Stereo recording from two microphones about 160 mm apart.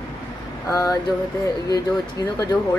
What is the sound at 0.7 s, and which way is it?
Speech, 20° left (ahead or behind).